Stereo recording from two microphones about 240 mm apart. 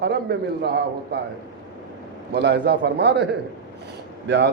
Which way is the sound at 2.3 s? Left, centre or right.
Right.